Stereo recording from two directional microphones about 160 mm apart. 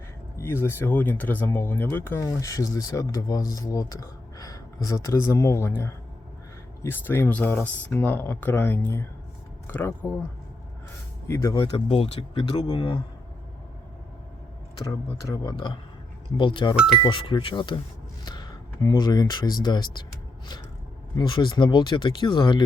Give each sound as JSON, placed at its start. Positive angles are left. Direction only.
{"t": 0.3, "sound": "speech", "side_deg": 15}
{"t": 11.3, "sound": "speech", "side_deg": 20}
{"t": 11.6, "sound": "speech", "side_deg": 35}
{"t": 15.3, "sound": "speech", "side_deg": 25}
{"t": 21.2, "sound": "speech", "side_deg": 30}